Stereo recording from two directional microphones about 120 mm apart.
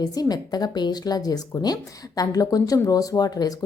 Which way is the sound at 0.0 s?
30° left (ahead or behind).